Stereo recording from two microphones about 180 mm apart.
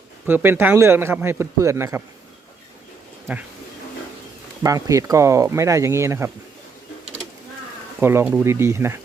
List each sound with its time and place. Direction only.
0.3 s speech: 10° right (ahead or behind)
3.3 s speech: 10° right (ahead or behind)
4.6 s speech: 20° right (ahead or behind)
8.0 s speech: 10° right (ahead or behind)